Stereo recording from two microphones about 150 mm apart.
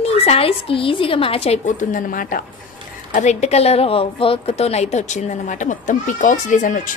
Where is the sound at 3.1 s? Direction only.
50° left (ahead or behind).